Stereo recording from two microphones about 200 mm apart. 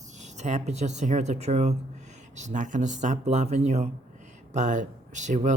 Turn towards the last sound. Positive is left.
turn(degrees=-35)  # may be behind; listen again after turning